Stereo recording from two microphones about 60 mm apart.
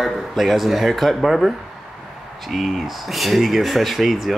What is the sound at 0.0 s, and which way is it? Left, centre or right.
Speech, centre.